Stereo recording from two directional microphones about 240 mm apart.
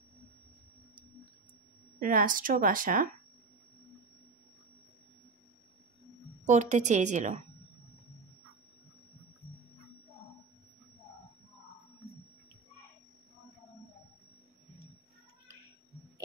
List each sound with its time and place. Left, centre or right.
2.0 s speech: right
6.4 s a woman's voice: right